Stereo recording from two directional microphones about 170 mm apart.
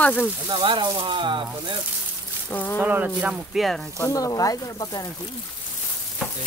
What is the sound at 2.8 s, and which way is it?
Speech, 10° right (ahead or behind).